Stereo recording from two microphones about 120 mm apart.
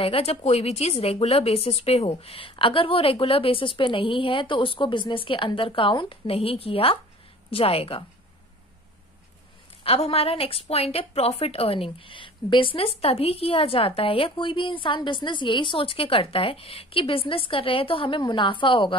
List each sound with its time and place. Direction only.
0.0 s a woman's voice: 55° left (ahead or behind)
9.8 s a woman's voice: 55° left (ahead or behind)